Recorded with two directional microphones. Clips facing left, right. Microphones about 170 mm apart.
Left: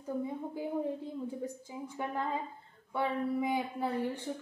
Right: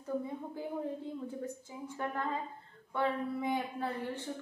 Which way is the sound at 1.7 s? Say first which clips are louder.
Left 2 dB; 20° left (ahead or behind).